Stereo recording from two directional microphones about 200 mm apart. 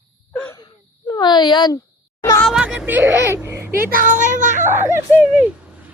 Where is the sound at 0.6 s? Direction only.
20° left (ahead or behind).